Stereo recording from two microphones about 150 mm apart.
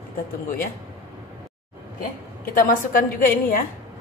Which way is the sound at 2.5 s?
65° left (ahead or behind).